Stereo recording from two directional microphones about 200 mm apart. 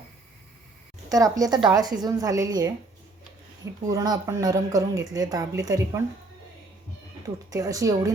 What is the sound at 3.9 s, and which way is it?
Speech, 15° right (ahead or behind).